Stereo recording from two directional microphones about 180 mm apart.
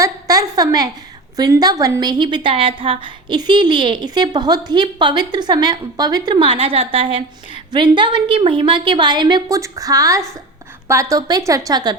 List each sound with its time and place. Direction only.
0.0 s a woman's voice: 20° right (ahead or behind)